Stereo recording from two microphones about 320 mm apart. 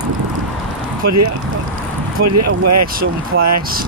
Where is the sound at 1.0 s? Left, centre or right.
Right.